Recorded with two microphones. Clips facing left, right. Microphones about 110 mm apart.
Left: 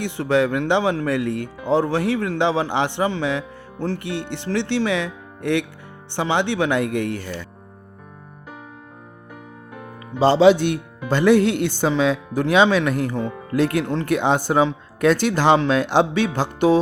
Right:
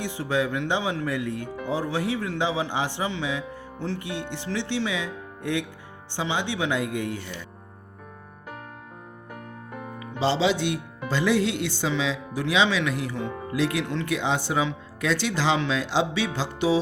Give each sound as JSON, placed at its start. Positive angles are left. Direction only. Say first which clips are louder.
{"t": 0.0, "sound": "speech", "louder": "left 7 dB", "side_deg": 65}
{"t": 6.1, "sound": "speech", "louder": "left 7 dB", "side_deg": 65}
{"t": 9.7, "sound": "music", "louder": "even", "side_deg": 0}
{"t": 10.0, "sound": "speech", "louder": "left 9 dB", "side_deg": 50}